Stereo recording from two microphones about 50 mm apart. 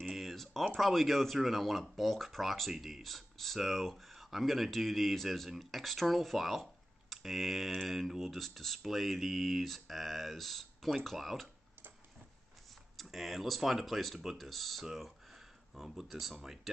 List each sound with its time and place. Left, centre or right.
0.1 s a sound: centre
0.7 s speech: centre
12.9 s speech: centre